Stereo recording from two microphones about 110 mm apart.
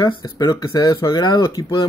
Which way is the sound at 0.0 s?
45° left (ahead or behind).